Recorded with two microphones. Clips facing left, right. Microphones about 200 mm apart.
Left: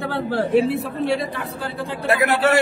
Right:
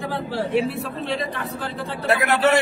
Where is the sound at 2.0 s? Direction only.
10° left (ahead or behind).